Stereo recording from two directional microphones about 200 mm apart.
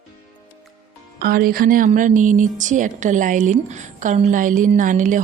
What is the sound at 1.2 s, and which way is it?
A woman's voice, 50° right (ahead or behind).